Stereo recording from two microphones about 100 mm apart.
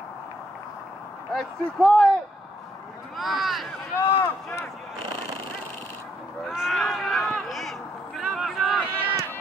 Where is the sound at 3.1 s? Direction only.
Centre (ahead or behind).